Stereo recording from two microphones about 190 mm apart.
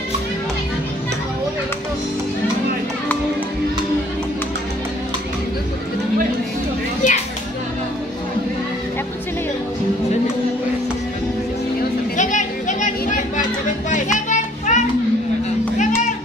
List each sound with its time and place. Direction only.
7.0 s children playing: 40° left (ahead or behind)
12.2 s a sound: 40° left (ahead or behind)
13.8 s music: 40° left (ahead or behind)